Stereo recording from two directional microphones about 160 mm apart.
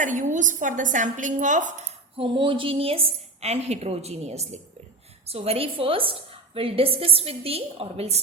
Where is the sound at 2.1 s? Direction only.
30° right (ahead or behind).